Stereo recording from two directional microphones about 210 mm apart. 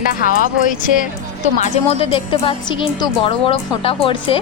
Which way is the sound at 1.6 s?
25° left (ahead or behind).